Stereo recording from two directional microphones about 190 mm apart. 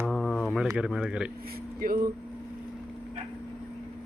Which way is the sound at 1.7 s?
50° right (ahead or behind).